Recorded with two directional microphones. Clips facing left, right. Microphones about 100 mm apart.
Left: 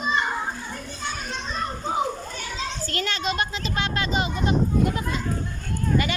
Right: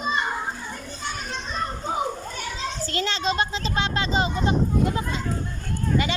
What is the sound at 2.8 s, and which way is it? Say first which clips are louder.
Speech: right 3 dB; 25° right (ahead or behind).